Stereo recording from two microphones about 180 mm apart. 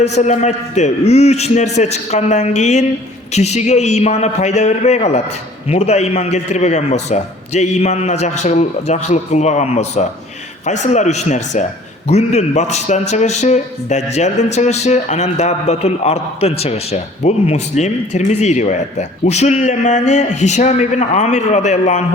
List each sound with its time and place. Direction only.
0.0 s a man's voice: 40° left (ahead or behind)